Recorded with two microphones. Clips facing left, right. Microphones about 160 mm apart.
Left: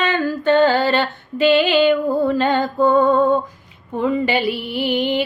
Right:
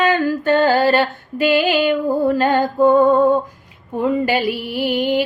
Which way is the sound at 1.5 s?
5° right (ahead or behind).